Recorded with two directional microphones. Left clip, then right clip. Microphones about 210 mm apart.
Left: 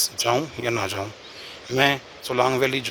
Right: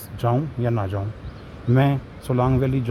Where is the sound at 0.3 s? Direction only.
25° left (ahead or behind).